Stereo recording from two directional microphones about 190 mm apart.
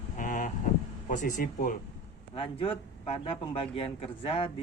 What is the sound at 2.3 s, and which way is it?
Speech, 30° left (ahead or behind).